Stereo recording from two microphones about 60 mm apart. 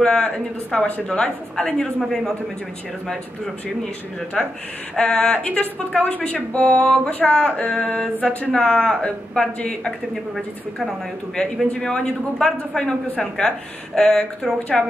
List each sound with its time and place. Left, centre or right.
0.0 s a man's voice: centre
0.8 s speech: left
1.1 s a man's voice: centre
4.4 s a man's voice: centre
10.3 s a woman's voice: centre